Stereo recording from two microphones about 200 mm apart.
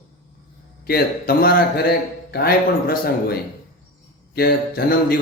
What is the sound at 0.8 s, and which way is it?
Speech, 50° left (ahead or behind).